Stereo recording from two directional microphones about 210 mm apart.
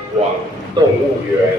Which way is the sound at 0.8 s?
20° right (ahead or behind).